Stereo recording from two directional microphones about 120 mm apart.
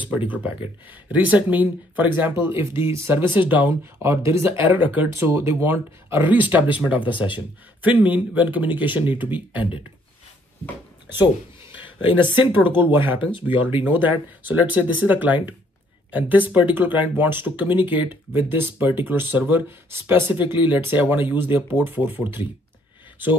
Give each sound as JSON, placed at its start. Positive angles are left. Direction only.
{"t": 0.3, "sound": "speech", "side_deg": -15}
{"t": 12.4, "sound": "speech", "side_deg": -15}